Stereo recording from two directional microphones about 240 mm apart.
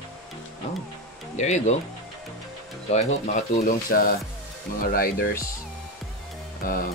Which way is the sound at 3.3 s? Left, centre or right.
Left.